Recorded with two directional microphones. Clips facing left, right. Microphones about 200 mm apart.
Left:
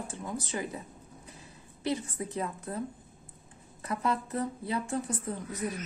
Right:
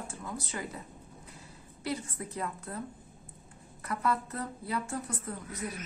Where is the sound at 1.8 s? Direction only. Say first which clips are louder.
Left 4 dB; 20° left (ahead or behind).